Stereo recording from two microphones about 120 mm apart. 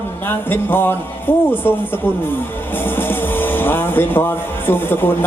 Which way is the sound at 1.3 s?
15° left (ahead or behind).